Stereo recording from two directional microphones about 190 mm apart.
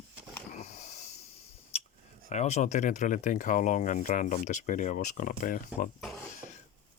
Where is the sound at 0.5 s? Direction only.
35° left (ahead or behind).